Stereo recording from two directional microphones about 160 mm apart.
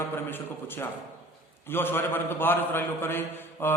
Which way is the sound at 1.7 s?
15° left (ahead or behind).